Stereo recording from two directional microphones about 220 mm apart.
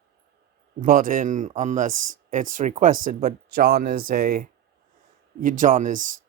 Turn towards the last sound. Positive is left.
turn(degrees=-35)  # may be behind; listen again after turning